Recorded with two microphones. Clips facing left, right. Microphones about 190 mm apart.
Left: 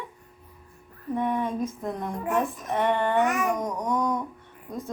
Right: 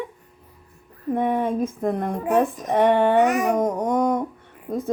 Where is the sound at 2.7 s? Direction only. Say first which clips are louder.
Right 7 dB; 70° right (ahead or behind).